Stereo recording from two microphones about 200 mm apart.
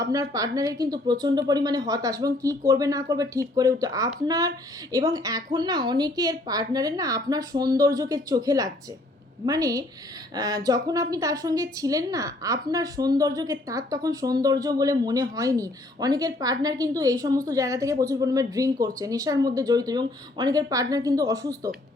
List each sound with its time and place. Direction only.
0.0 s a woman's voice: 15° right (ahead or behind)